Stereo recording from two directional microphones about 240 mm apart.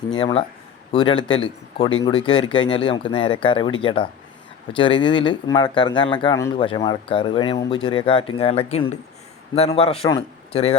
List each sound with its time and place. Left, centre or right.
0.1 s speech: centre